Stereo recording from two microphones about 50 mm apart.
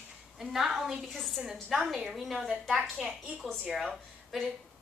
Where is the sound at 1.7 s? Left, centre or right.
Centre.